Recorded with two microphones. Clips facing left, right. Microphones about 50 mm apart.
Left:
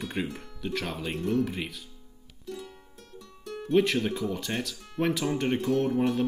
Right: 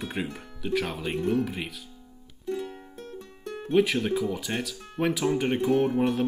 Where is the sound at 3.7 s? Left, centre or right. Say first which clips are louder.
Right 1 dB; centre.